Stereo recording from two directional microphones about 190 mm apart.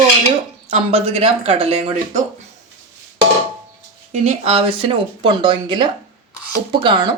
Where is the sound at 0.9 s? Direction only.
30° right (ahead or behind).